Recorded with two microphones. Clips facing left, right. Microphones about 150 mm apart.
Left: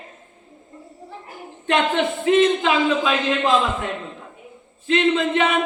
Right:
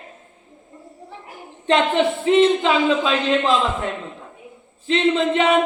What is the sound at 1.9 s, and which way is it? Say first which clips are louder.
Speech: even; 30° right (ahead or behind).